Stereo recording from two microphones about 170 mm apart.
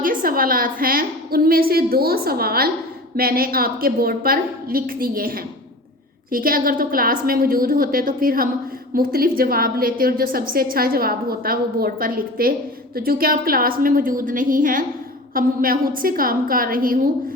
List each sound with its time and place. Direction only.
0.0 s a woman's voice: 55° right (ahead or behind)